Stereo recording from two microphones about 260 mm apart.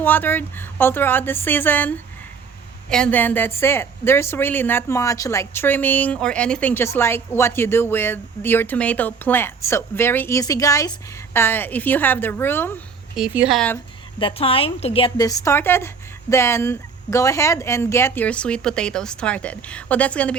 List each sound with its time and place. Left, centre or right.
0.0 s a woman's voice: centre
14.2 s a woman's voice: centre